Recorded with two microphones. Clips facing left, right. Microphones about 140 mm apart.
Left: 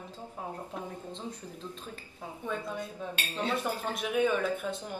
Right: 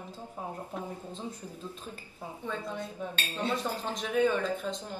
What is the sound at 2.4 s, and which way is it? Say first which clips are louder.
Speech: left 1 dB; 10° left (ahead or behind).